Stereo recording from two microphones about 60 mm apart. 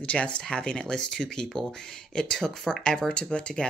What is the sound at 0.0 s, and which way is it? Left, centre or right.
Speech, left.